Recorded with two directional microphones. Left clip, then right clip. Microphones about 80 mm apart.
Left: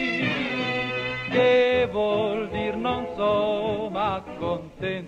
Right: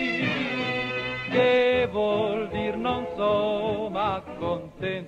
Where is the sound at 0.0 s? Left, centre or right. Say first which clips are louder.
Left 1 dB; left.